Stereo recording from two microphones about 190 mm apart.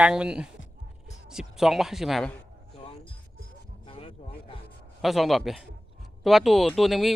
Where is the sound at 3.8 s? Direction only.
30° left (ahead or behind).